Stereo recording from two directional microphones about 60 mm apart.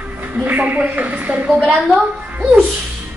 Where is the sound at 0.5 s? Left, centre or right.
Right.